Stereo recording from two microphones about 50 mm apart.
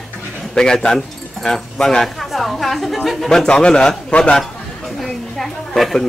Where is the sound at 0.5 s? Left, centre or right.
Centre.